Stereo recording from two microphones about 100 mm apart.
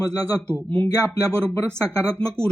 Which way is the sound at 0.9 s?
35° left (ahead or behind).